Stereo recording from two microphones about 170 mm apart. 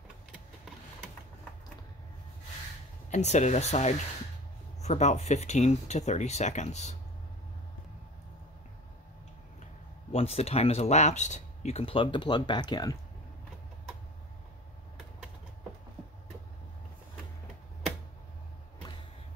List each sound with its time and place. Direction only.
3.1 s speech: 45° left (ahead or behind)
10.1 s speech: 35° left (ahead or behind)